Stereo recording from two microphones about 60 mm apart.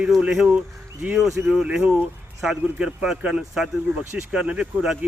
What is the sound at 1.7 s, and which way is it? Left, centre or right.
Speech, centre.